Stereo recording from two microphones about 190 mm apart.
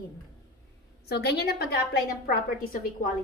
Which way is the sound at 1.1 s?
60° left (ahead or behind).